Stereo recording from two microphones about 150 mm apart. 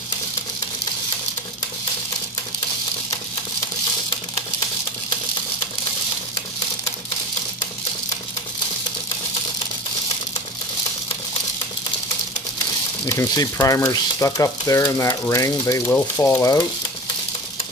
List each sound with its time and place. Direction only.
13.1 s speech: 20° left (ahead or behind)